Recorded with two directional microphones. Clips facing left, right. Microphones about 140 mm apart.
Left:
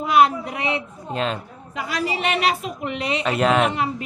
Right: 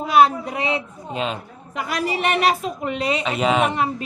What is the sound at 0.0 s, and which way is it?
Speech, 35° right (ahead or behind).